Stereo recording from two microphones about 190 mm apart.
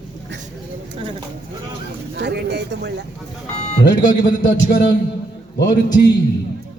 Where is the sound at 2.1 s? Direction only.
65° right (ahead or behind).